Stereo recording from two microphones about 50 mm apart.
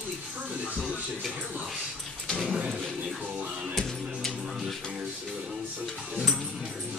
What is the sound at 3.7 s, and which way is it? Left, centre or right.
Music, centre.